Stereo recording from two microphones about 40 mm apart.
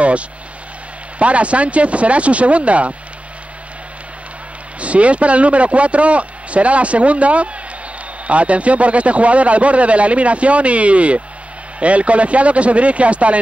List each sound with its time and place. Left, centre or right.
1.2 s a man's voice: right
4.7 s a man's voice: right